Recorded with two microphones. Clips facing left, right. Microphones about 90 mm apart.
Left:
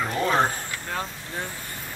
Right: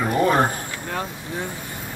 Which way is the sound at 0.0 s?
10° right (ahead or behind).